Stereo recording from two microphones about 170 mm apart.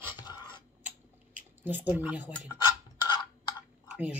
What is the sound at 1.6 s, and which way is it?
Speech, 10° right (ahead or behind).